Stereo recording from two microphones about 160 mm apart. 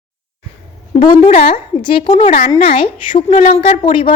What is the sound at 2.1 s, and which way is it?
Speech, 50° left (ahead or behind).